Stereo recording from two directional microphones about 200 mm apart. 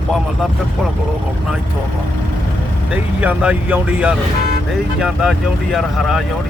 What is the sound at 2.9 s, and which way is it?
Speech, 5° right (ahead or behind).